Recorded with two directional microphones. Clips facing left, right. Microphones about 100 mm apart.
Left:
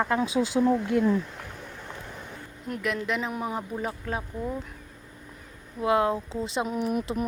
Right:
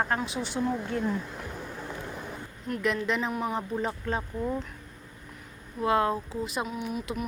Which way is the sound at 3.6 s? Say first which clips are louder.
Right 1 dB; 5° left (ahead or behind).